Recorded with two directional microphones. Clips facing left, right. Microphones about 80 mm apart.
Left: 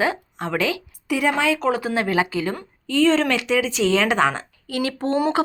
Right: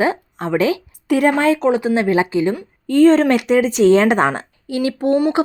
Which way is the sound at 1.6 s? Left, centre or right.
Right.